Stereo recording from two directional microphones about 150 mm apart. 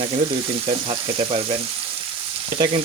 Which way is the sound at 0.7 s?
40° right (ahead or behind).